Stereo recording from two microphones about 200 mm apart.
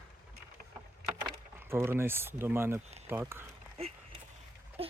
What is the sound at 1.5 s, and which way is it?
Speech, 10° right (ahead or behind).